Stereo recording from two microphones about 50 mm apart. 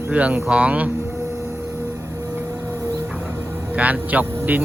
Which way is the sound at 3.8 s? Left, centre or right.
Right.